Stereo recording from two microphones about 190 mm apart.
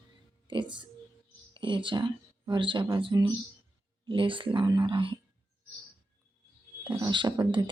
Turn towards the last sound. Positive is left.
turn(degrees=-25)  # may be behind; listen again after turning